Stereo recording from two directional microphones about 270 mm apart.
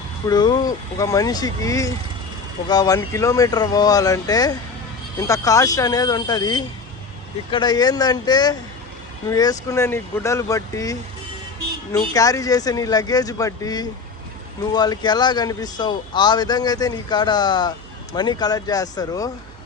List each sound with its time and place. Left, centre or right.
0.3 s speech: centre